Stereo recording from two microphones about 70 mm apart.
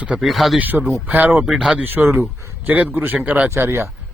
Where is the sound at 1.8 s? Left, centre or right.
Right.